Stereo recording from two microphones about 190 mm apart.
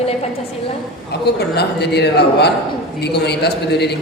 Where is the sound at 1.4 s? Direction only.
60° left (ahead or behind).